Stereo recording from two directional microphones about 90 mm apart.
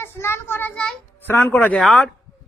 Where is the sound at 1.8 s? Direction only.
Centre (ahead or behind).